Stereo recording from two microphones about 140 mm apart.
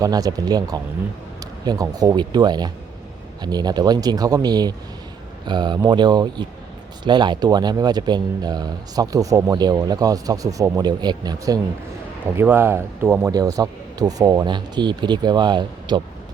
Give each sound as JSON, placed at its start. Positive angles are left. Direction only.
{"t": 0.0, "sound": "speech", "side_deg": -25}
{"t": 12.4, "sound": "speech", "side_deg": -15}